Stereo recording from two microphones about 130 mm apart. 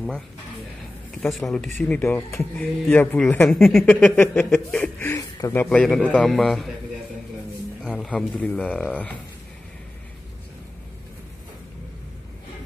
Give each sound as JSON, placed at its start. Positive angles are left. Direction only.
{"t": 1.2, "sound": "speech", "side_deg": 0}
{"t": 1.8, "sound": "a man's voice", "side_deg": 15}
{"t": 3.5, "sound": "speech", "side_deg": 0}
{"t": 3.8, "sound": "a man's voice", "side_deg": 10}
{"t": 4.9, "sound": "a man's voice", "side_deg": 20}
{"t": 7.8, "sound": "a man's voice", "side_deg": 5}